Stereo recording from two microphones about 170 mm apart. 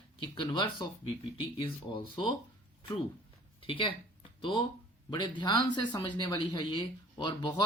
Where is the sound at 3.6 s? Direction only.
30° left (ahead or behind).